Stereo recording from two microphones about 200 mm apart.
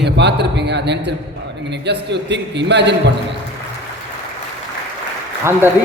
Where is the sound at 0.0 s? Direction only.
60° right (ahead or behind).